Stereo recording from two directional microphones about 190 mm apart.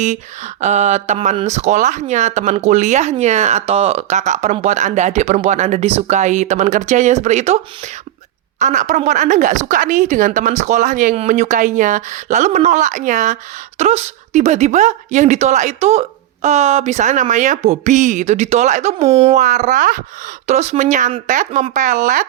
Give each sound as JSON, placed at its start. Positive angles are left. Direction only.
{"t": 0.0, "sound": "speech", "side_deg": -40}